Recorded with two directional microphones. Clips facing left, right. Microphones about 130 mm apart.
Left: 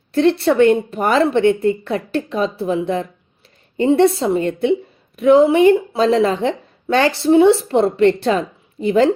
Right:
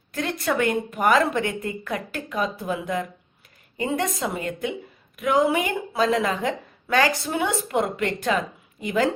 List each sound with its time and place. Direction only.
0.1 s a woman's voice: 30° left (ahead or behind)